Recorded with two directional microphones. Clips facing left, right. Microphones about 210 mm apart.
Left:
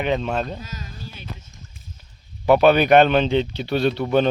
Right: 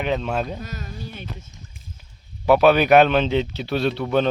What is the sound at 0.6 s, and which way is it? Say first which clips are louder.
Music: right 3 dB; 60° right (ahead or behind).